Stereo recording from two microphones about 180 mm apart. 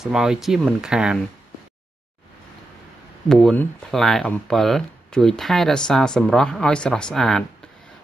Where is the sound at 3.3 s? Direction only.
5° left (ahead or behind).